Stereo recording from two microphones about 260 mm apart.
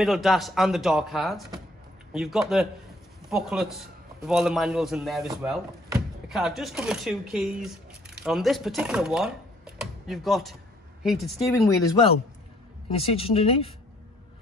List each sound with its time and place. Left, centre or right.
0.0 s a man's voice: centre
12.9 s speech: left